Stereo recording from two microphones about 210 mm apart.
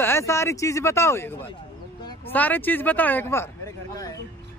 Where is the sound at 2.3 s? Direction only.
10° left (ahead or behind).